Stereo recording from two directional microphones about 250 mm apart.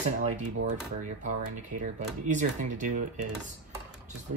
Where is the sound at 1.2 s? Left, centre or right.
Right.